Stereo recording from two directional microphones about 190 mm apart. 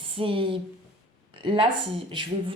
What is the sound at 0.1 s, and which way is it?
Speech, 30° right (ahead or behind).